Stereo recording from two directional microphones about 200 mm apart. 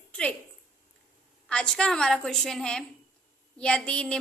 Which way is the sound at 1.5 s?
5° left (ahead or behind).